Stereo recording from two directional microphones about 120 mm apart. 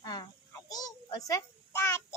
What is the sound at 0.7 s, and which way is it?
A child's voice, 30° left (ahead or behind).